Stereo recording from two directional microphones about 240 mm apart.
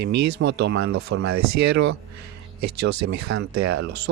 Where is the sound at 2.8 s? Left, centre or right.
Right.